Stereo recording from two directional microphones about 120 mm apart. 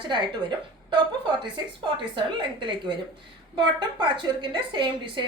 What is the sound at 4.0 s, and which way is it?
A woman's voice, 40° right (ahead or behind).